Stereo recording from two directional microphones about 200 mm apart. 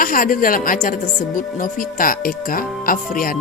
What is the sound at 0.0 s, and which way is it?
Speech, 45° left (ahead or behind).